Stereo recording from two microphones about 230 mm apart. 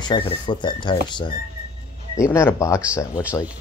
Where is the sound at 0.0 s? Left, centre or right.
Centre.